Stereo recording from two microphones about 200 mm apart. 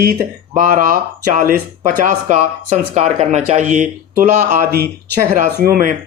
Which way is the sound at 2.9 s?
35° right (ahead or behind).